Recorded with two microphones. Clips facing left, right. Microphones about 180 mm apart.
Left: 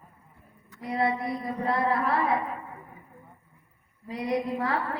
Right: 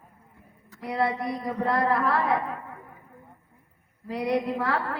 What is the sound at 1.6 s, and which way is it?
Music, 65° right (ahead or behind).